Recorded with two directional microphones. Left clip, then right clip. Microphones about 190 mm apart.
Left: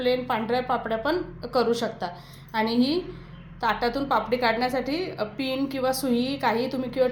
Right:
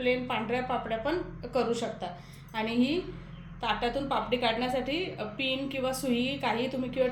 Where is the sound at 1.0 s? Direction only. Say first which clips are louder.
Left 5 dB; 35° left (ahead or behind).